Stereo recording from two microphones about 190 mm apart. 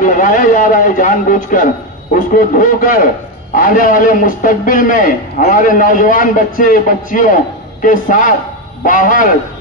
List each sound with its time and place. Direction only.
0.0 s a man's voice: 45° left (ahead or behind)